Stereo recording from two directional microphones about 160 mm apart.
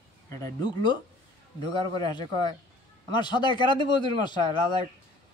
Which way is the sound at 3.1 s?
30° left (ahead or behind).